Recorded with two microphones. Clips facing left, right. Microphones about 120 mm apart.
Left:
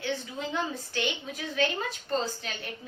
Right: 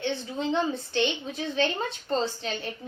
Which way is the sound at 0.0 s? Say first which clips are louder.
Right 4 dB; 25° right (ahead or behind).